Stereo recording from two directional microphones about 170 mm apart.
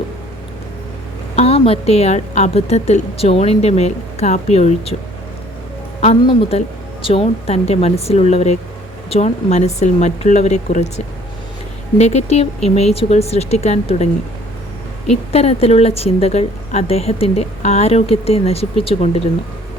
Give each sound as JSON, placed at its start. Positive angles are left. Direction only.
{"t": 1.4, "sound": "a woman's voice", "side_deg": 35}
{"t": 6.0, "sound": "a woman's voice", "side_deg": 35}